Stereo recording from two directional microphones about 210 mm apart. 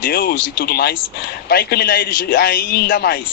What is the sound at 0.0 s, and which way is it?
A woman's voice, 45° left (ahead or behind).